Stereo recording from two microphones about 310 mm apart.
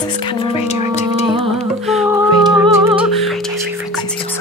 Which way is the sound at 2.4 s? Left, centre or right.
Centre.